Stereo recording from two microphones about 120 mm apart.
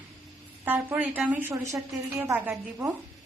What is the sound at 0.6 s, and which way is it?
A woman's voice, 15° right (ahead or behind).